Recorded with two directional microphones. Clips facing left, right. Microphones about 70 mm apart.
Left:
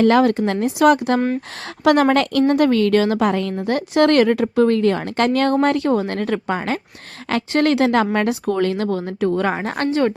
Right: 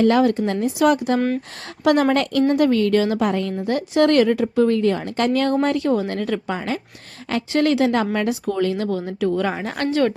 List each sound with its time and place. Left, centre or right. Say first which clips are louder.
0.0 s a woman's voice: left 2 dB; left
1.8 s a woman's voice: left 2 dB; left
7.3 s speech: left 2 dB; left